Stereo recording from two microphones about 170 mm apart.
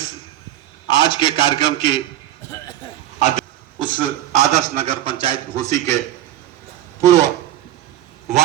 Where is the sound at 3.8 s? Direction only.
25° left (ahead or behind).